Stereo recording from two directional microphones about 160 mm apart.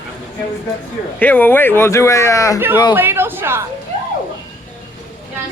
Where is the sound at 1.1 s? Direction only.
10° left (ahead or behind).